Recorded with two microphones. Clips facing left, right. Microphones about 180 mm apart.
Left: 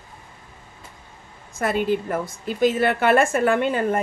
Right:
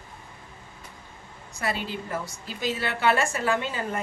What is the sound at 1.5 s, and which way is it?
A woman's voice, 50° left (ahead or behind).